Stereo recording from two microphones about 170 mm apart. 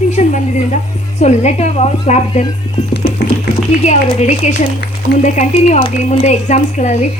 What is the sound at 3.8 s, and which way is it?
A woman's voice, 45° left (ahead or behind).